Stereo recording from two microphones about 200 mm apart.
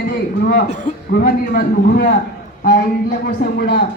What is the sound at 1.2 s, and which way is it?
Speech, 50° left (ahead or behind).